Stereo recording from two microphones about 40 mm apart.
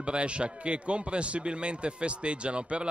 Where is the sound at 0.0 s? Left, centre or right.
Right.